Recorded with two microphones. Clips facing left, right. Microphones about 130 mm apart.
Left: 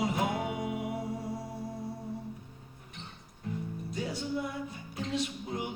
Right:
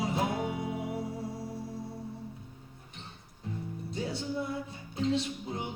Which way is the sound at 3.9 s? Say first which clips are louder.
Even; 25° right (ahead or behind).